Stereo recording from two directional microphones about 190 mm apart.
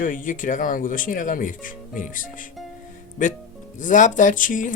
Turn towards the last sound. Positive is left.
turn(degrees=45)  # may be behind; listen again after turning